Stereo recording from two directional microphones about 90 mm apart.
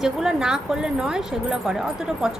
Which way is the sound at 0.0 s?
5° right (ahead or behind).